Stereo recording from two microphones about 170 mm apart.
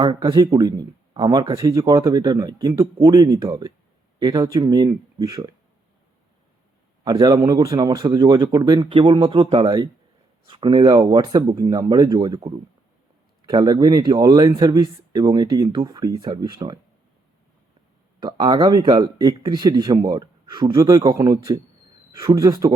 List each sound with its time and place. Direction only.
0.0 s speech: 25° right (ahead or behind)
7.0 s speech: 20° right (ahead or behind)
18.2 s speech: 25° right (ahead or behind)